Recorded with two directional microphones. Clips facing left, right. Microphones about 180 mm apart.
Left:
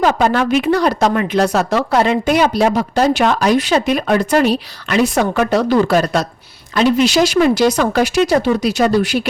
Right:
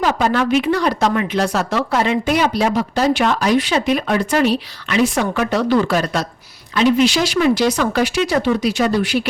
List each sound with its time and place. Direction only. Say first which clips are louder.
0.0 s speech: left 3 dB; 45° left (ahead or behind)